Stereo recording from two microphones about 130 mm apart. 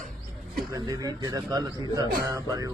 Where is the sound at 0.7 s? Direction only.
25° right (ahead or behind).